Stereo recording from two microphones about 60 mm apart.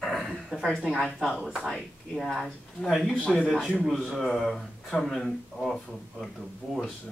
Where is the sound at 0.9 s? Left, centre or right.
Centre.